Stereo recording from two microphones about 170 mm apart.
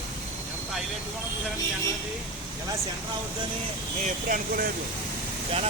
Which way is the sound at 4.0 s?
55° right (ahead or behind).